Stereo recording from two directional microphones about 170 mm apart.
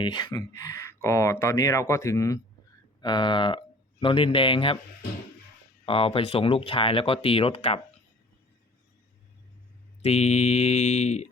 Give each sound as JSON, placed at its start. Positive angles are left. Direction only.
{"t": 0.0, "sound": "speech", "side_deg": 25}
{"t": 5.8, "sound": "speech", "side_deg": 35}
{"t": 10.0, "sound": "speech", "side_deg": 40}